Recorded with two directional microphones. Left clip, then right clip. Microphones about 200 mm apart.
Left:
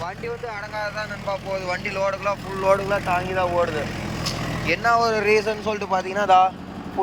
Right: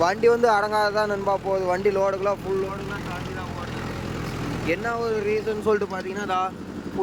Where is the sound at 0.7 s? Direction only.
25° right (ahead or behind).